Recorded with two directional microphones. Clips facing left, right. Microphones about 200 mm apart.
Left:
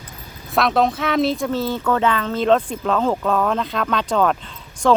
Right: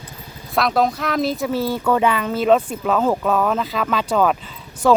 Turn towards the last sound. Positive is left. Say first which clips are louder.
# right 1 dB
turn(degrees=-10)  # may be behind; listen again after turning